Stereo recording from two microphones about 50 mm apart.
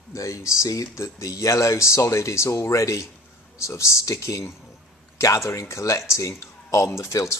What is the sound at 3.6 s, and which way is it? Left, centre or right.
Speech, left.